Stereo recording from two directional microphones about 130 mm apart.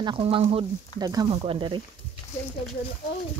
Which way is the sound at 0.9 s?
30° right (ahead or behind).